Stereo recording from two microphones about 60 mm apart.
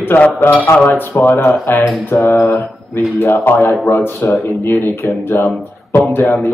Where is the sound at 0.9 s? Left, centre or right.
Left.